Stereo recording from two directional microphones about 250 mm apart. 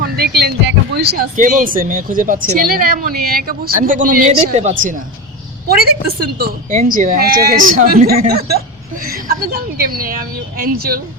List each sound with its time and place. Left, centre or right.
0.0 s speech: right